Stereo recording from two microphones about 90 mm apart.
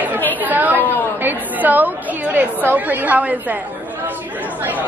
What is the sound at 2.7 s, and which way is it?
Speech, 20° right (ahead or behind).